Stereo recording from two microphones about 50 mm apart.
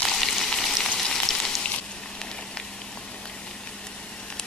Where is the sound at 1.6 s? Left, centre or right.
Centre.